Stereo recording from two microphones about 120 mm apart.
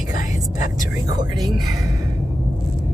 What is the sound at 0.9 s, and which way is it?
Speech, 35° right (ahead or behind).